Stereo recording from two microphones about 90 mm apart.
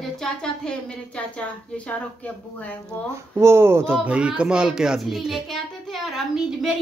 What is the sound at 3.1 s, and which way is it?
Speech, 30° right (ahead or behind).